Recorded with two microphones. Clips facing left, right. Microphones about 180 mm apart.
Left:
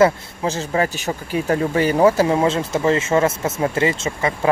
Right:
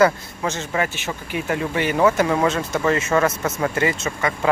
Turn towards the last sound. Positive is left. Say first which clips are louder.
# left 2 dB
turn(degrees=25)  # may be behind; listen again after turning